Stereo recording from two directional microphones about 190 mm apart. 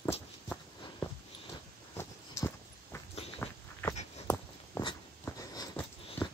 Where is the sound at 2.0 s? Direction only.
15° left (ahead or behind).